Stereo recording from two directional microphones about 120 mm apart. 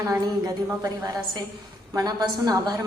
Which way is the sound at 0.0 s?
30° right (ahead or behind).